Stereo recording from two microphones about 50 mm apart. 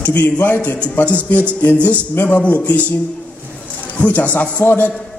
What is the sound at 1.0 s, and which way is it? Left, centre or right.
A man's voice, left.